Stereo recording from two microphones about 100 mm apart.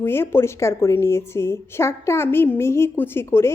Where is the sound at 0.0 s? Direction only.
25° left (ahead or behind).